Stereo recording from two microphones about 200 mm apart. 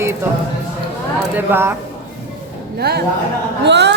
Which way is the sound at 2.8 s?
50° right (ahead or behind).